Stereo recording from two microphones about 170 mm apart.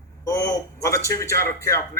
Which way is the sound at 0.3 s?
20° left (ahead or behind).